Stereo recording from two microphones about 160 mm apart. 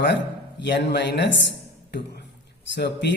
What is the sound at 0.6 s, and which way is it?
Speech, 90° left.